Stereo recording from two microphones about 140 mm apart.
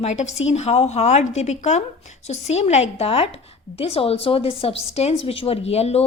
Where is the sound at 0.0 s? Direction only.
55° left (ahead or behind).